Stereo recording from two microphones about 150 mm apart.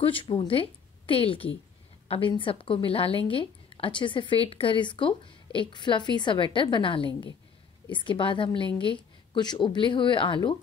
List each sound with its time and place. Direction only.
0.0 s a woman's voice: 35° left (ahead or behind)